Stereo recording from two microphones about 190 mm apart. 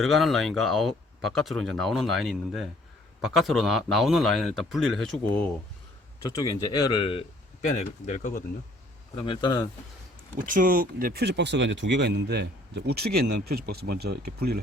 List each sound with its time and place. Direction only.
0.0 s speech: centre (ahead or behind)
6.2 s a man's voice: 20° left (ahead or behind); by 8.4 s 45° left (ahead or behind)
9.2 s a man's voice: 25° left (ahead or behind)
10.4 s speech: 45° right (ahead or behind)